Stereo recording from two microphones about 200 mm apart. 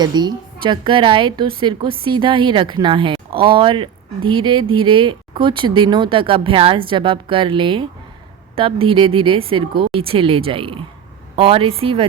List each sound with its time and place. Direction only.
0.0 s speech: 20° right (ahead or behind)